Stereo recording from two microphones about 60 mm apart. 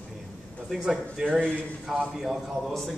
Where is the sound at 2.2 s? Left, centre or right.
Centre.